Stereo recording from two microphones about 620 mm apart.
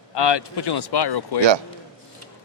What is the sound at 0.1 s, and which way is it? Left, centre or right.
Speech, left.